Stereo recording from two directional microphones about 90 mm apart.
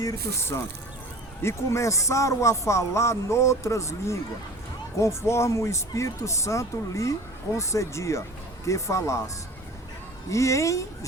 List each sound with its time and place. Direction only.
0.0 s speech: 40° left (ahead or behind)